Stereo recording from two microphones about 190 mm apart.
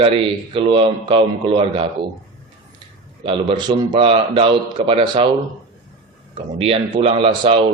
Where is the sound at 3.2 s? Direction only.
25° right (ahead or behind).